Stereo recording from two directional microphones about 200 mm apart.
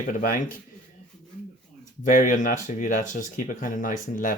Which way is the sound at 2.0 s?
40° left (ahead or behind).